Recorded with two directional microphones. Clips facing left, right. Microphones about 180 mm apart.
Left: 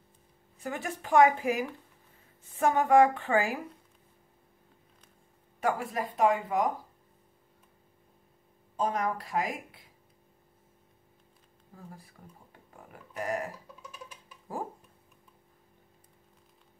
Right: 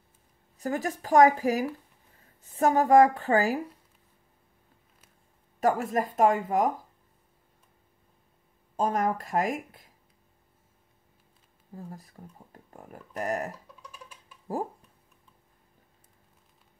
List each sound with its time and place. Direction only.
0.6 s speech: 40° right (ahead or behind)
5.6 s speech: 40° right (ahead or behind)
8.7 s speech: 45° right (ahead or behind)
11.7 s speech: 40° right (ahead or behind)
13.1 s speech: 40° right (ahead or behind)